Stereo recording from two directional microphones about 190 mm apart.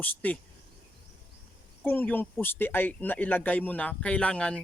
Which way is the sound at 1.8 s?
10° left (ahead or behind).